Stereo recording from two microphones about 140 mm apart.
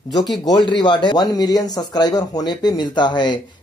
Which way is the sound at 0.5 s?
30° left (ahead or behind).